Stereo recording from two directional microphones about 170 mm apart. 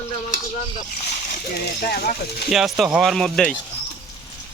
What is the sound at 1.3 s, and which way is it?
Speech, 65° left (ahead or behind).